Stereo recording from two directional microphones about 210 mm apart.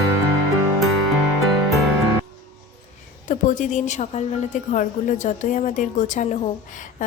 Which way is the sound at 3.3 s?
40° left (ahead or behind).